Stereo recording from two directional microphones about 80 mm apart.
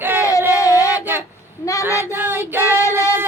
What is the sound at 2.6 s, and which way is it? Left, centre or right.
Child singing, left.